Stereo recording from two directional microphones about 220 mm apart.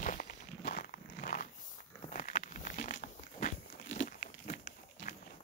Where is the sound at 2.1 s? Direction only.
35° left (ahead or behind).